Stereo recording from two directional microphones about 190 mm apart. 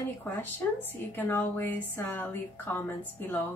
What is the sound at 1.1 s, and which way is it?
A woman's voice, 10° left (ahead or behind).